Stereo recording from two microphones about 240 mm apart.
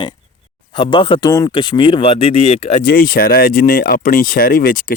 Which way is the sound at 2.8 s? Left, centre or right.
Left.